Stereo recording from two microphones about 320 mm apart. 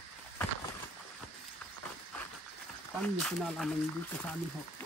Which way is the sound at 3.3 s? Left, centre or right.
Centre.